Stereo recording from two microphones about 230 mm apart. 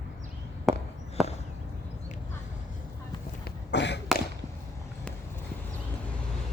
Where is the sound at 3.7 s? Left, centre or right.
Left.